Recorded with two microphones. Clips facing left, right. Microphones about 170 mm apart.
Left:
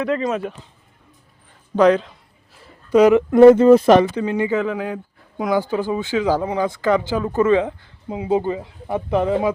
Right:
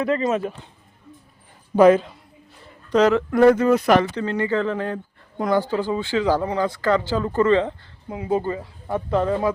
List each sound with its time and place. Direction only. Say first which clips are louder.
0.0 s speech: even; centre (ahead or behind)
1.7 s speech: right 1 dB; 5° right (ahead or behind)
2.6 s speech: left 4 dB; 10° left (ahead or behind); by 4.0 s 25° left (ahead or behind)
4.1 s speech: left 2 dB; 15° left (ahead or behind)